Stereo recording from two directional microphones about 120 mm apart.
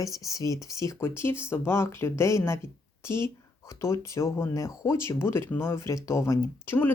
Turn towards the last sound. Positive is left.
turn(degrees=20)  # may be behind; listen again after turning